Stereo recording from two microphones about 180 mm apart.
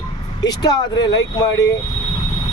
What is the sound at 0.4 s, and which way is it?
Speech, 20° left (ahead or behind).